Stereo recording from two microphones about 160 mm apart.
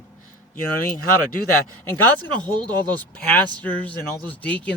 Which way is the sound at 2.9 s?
10° left (ahead or behind).